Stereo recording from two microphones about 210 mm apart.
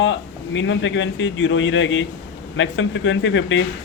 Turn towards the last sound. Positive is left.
turn(degrees=65)  # may be behind; listen again after turning